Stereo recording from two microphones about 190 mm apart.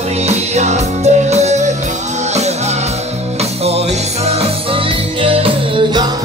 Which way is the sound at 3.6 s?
35° right (ahead or behind).